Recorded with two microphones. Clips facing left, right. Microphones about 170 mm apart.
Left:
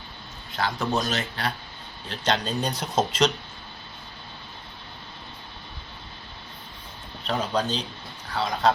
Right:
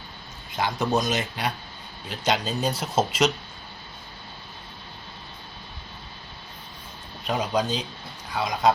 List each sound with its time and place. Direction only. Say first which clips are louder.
0.5 s speech: right 2 dB; 20° right (ahead or behind)
7.3 s speech: right 1 dB; 10° right (ahead or behind)